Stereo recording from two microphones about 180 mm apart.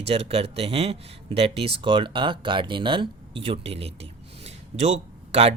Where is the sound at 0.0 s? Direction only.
35° right (ahead or behind).